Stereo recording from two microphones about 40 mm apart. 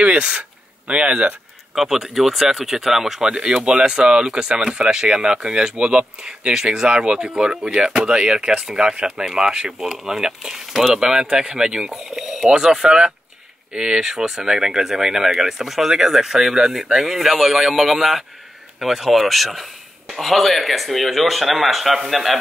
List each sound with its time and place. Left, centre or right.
0.0 s speech: right
1.8 s speech: centre
3.3 s speech: centre
11.9 s speech: centre
12.4 s speech: centre